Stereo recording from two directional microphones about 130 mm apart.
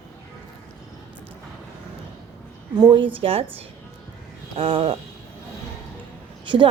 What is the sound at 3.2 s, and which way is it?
Speech, 50° right (ahead or behind).